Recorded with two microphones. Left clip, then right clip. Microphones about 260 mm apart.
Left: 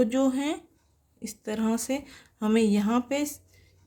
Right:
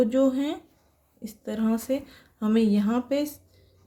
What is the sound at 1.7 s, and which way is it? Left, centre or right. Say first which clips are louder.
Speech: right 2 dB; left.